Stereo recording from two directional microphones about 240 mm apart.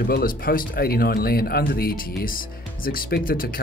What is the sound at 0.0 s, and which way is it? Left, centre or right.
Speech, left.